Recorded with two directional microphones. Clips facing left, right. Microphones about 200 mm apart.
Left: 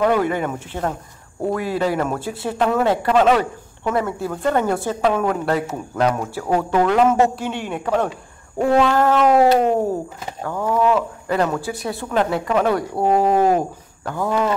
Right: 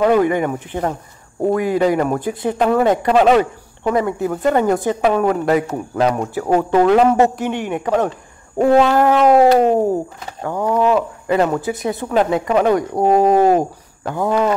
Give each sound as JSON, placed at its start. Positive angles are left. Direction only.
{"t": 0.0, "sound": "speech", "side_deg": -15}
{"t": 10.4, "sound": "speech", "side_deg": -20}